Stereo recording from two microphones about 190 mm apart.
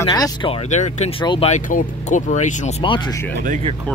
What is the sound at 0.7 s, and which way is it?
Speech, 40° left (ahead or behind).